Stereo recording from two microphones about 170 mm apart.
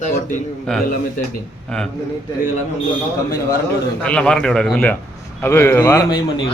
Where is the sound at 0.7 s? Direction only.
5° left (ahead or behind).